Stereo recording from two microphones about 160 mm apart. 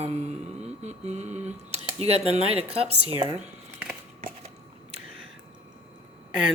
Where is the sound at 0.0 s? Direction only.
45° right (ahead or behind).